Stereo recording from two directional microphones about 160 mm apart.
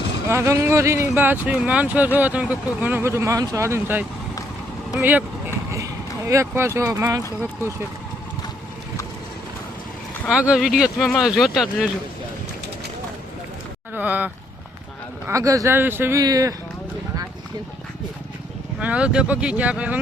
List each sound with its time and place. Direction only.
0.3 s speech: 20° right (ahead or behind)
10.2 s speech: 5° right (ahead or behind)
13.9 s speech: 10° right (ahead or behind)
15.3 s speech: 20° right (ahead or behind)
18.8 s speech: 5° right (ahead or behind)